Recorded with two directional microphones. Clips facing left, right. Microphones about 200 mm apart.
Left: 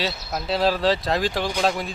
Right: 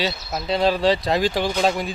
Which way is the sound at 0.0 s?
Centre (ahead or behind).